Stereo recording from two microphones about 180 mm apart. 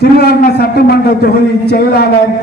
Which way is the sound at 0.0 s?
60° left (ahead or behind).